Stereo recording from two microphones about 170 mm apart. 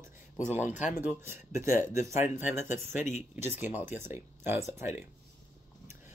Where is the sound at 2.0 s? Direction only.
50° left (ahead or behind).